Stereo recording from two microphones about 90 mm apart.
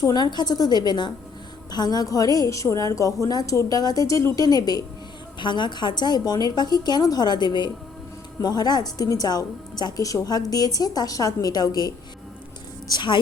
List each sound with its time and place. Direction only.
0.0 s a woman's voice: 50° left (ahead or behind)
5.4 s a woman's voice: 60° left (ahead or behind)
12.9 s a woman's voice: 60° left (ahead or behind)